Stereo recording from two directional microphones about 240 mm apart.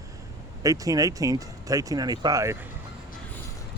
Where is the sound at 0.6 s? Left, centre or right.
Centre.